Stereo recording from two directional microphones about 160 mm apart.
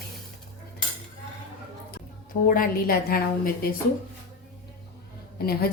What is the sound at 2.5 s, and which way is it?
A woman's voice, 65° left (ahead or behind).